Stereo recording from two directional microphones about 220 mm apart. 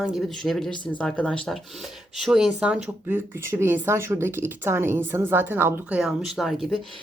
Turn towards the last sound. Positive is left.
turn(degrees=0)  # may be behind; listen again after turning